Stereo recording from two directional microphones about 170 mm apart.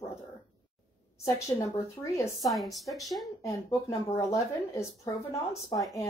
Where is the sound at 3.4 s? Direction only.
20° left (ahead or behind).